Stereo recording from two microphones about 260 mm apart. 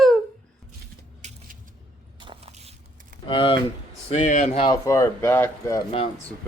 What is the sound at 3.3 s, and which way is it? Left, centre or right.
Speech, centre.